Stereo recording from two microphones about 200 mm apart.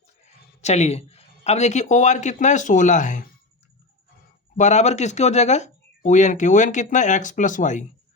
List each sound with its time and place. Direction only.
0.6 s a man's voice: 35° left (ahead or behind)
4.5 s speech: 35° left (ahead or behind)